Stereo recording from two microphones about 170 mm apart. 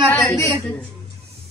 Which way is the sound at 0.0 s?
10° left (ahead or behind).